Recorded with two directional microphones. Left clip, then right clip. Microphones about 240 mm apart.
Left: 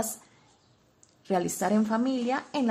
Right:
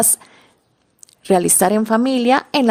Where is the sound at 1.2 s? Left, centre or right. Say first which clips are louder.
Right 13 dB; right.